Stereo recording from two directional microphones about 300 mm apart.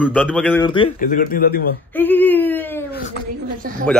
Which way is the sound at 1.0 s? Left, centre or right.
Left.